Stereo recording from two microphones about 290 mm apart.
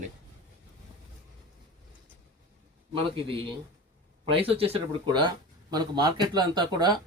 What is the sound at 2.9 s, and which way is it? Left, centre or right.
A man's voice, centre.